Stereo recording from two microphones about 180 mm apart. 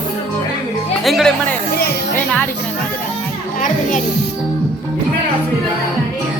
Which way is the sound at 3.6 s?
45° left (ahead or behind).